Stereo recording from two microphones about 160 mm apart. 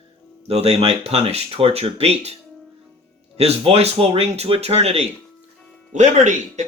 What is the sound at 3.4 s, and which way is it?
Speech, 40° right (ahead or behind).